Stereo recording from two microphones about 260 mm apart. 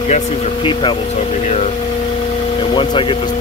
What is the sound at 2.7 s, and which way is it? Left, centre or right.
Speech, centre.